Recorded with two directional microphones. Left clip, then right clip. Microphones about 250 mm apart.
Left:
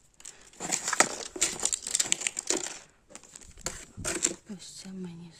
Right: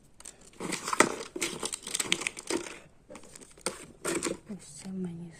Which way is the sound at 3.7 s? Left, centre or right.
Left.